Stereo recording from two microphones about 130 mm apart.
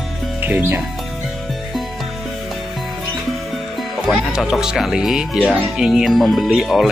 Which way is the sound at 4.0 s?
Centre (ahead or behind).